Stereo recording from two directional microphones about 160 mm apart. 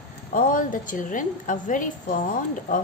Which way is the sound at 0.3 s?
55° left (ahead or behind).